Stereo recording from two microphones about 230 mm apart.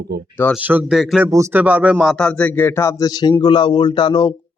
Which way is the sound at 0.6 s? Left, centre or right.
Centre.